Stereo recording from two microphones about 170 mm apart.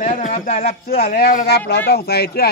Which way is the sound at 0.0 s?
40° left (ahead or behind).